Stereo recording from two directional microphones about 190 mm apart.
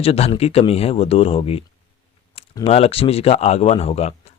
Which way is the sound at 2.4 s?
30° left (ahead or behind).